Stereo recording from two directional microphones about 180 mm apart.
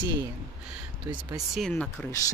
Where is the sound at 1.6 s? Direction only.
5° left (ahead or behind).